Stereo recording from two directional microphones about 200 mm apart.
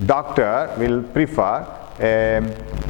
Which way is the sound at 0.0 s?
20° left (ahead or behind).